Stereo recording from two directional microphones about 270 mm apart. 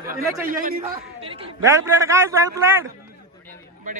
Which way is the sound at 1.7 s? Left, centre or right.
Centre.